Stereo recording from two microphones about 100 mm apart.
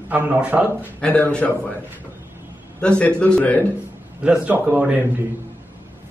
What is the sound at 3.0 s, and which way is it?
Speech, 10° left (ahead or behind).